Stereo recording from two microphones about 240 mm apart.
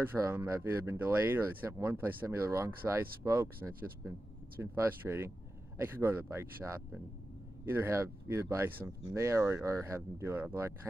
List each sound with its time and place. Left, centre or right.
0.0 s speech: centre